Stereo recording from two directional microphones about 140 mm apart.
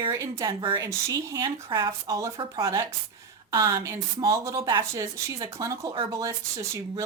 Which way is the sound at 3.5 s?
25° right (ahead or behind).